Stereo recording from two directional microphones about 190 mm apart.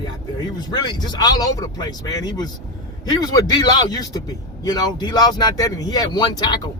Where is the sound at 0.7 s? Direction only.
25° left (ahead or behind).